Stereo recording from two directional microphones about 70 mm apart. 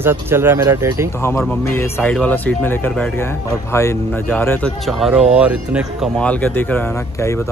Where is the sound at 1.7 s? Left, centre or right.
Left.